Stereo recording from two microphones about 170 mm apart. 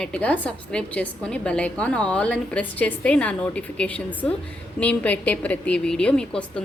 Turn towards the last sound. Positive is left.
turn(degrees=5)  # may be behind; listen again after turning